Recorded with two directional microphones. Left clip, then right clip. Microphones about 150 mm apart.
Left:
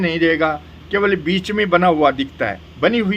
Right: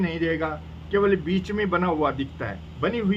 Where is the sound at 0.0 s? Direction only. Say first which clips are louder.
Left 10 dB; 15° left (ahead or behind).